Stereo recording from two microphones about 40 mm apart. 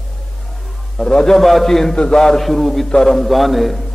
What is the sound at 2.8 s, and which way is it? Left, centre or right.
Speech, centre.